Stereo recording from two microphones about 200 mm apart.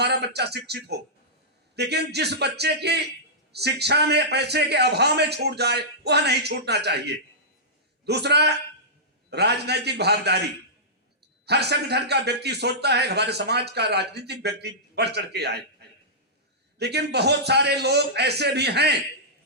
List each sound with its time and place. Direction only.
0.0 s speech: 55° right (ahead or behind)
11.4 s speech: 55° right (ahead or behind)
16.7 s speech: 55° right (ahead or behind)